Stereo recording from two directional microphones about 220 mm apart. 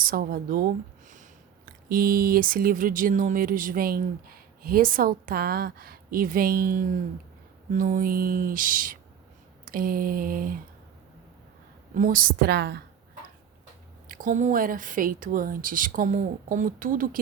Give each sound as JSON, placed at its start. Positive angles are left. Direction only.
{"t": 0.0, "sound": "speech", "side_deg": -40}
{"t": 11.9, "sound": "a woman's voice", "side_deg": -40}
{"t": 14.1, "sound": "speech", "side_deg": -35}